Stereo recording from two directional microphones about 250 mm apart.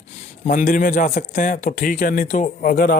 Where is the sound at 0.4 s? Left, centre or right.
Left.